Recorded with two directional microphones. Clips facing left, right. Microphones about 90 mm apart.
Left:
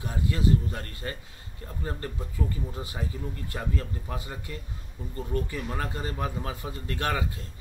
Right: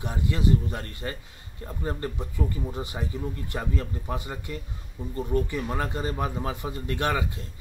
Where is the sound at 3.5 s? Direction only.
25° right (ahead or behind).